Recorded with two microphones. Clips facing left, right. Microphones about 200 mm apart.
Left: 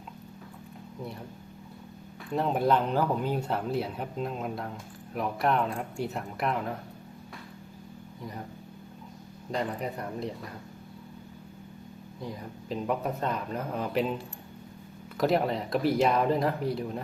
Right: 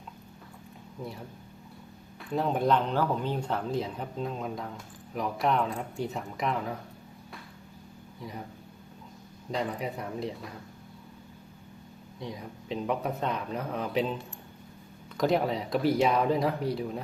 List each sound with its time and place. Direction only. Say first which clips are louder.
2.3 s speech: even; centre (ahead or behind)
9.5 s speech: even; centre (ahead or behind)
12.2 s speech: even; centre (ahead or behind)
15.2 s speech: even; centre (ahead or behind)